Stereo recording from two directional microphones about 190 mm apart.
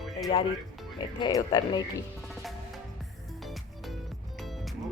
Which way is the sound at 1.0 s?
25° left (ahead or behind).